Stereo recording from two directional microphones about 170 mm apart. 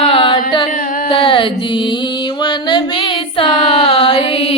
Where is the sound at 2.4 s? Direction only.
30° left (ahead or behind).